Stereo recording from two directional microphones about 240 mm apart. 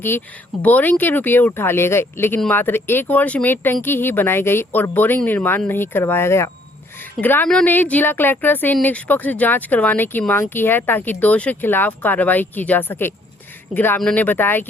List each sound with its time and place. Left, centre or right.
0.6 s speech: centre